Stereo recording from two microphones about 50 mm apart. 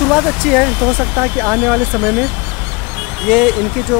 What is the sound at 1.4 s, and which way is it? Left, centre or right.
Speech, centre.